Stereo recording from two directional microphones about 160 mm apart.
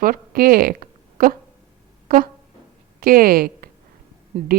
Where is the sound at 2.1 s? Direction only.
65° right (ahead or behind).